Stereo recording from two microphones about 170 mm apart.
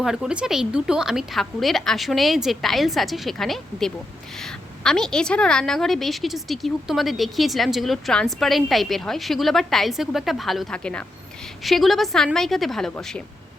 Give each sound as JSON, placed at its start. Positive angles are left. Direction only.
{"t": 0.0, "sound": "a woman's voice", "side_deg": -5}